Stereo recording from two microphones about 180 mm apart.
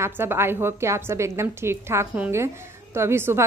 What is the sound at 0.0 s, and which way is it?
A woman's voice, 15° right (ahead or behind).